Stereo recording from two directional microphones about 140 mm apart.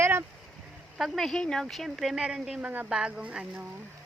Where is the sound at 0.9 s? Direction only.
Centre (ahead or behind).